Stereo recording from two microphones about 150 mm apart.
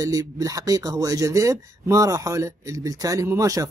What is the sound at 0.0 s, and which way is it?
Speech, 25° right (ahead or behind).